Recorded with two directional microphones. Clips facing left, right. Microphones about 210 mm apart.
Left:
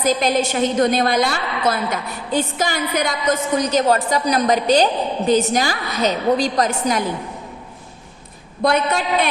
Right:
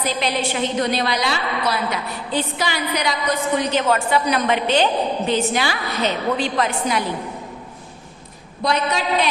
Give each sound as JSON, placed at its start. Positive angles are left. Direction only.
{"t": 0.0, "sound": "a woman's voice", "side_deg": 45}
{"t": 8.6, "sound": "a woman's voice", "side_deg": 55}